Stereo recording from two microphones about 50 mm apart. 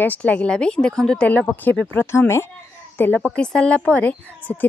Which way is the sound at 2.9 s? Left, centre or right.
Left.